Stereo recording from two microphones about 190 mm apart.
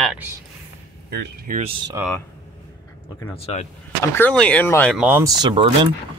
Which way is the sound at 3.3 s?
35° left (ahead or behind).